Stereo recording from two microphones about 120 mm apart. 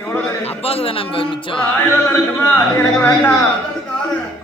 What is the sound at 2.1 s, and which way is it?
A man's voice, 20° left (ahead or behind).